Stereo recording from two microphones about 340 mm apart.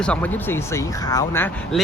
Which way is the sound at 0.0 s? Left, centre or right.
Centre.